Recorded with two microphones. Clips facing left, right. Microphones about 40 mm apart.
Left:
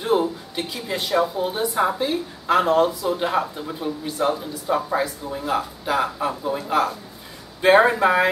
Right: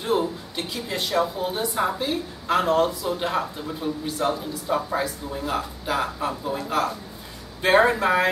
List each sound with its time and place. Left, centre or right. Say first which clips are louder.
0.0 s a woman's voice: left 3 dB; centre